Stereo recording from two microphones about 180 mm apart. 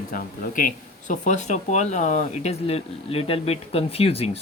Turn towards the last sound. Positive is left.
turn(degrees=35)  # may be behind; listen again after turning